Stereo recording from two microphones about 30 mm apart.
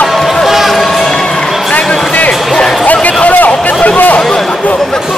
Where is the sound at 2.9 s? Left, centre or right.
Left.